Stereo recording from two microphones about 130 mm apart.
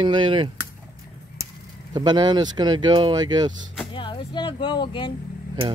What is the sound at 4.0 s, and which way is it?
Speech, 35° left (ahead or behind).